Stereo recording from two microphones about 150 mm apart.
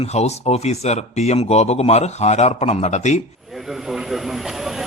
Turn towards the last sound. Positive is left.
turn(degrees=0)  # may be behind; listen again after turning